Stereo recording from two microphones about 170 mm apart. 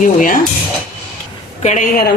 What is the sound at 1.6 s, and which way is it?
Speech, 50° left (ahead or behind).